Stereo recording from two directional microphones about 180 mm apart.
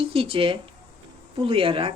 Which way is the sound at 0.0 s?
30° right (ahead or behind).